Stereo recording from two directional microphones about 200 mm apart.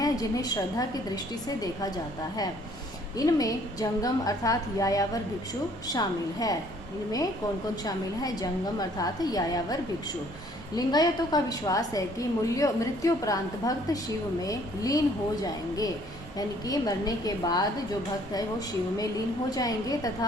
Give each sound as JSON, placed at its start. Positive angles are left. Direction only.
{"t": 0.0, "sound": "a woman's voice", "side_deg": 20}
{"t": 3.2, "sound": "a woman's voice", "side_deg": 20}
{"t": 7.9, "sound": "a woman's voice", "side_deg": 20}
{"t": 10.8, "sound": "a woman's voice", "side_deg": 20}
{"t": 19.5, "sound": "a woman's voice", "side_deg": 20}